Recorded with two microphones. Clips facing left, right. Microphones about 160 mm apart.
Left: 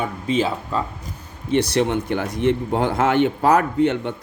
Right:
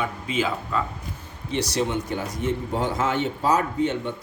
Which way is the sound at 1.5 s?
55° left (ahead or behind).